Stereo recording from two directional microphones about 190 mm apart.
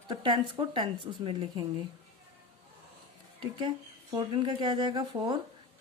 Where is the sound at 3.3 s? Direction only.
25° right (ahead or behind).